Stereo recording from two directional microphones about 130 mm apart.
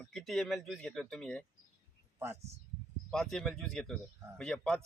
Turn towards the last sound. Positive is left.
turn(degrees=5)  # may be behind; listen again after turning